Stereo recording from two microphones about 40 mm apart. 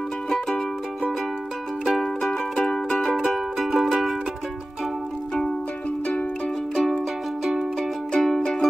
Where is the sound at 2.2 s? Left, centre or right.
Centre.